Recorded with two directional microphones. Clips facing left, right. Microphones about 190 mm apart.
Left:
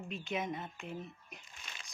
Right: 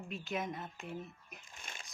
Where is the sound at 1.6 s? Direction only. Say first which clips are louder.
Right 4 dB; 50° right (ahead or behind).